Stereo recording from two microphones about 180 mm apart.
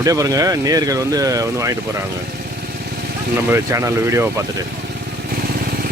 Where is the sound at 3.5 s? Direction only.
15° right (ahead or behind).